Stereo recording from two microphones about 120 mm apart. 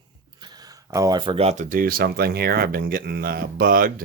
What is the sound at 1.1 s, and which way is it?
Speech, 45° right (ahead or behind).